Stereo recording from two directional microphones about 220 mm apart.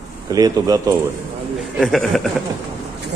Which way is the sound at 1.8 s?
Centre (ahead or behind).